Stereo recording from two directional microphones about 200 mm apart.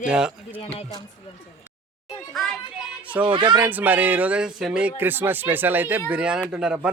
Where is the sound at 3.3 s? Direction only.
25° right (ahead or behind).